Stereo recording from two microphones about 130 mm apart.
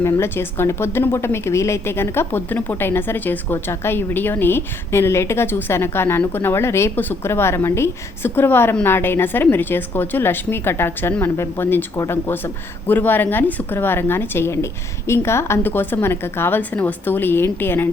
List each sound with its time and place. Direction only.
0.0 s a woman's voice: 20° left (ahead or behind)